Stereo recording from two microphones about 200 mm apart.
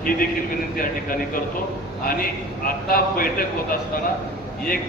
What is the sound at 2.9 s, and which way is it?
A man's voice, 45° left (ahead or behind).